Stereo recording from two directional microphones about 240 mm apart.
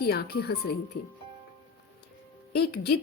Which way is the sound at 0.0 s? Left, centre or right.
Left.